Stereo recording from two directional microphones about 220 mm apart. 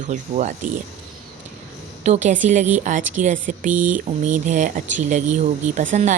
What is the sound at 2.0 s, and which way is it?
Speech, 35° right (ahead or behind).